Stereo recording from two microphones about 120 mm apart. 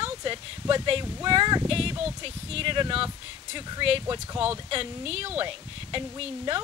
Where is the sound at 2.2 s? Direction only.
50° right (ahead or behind).